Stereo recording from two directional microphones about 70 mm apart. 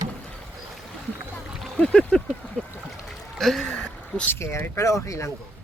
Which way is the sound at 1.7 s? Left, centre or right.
Centre.